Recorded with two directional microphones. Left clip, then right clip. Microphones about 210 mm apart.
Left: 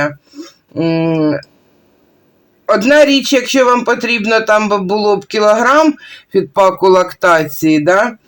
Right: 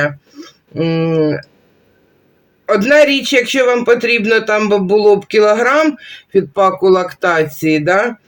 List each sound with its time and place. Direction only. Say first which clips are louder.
0.0 s speech: even; 20° left (ahead or behind)
2.6 s speech: left 1 dB; 20° left (ahead or behind)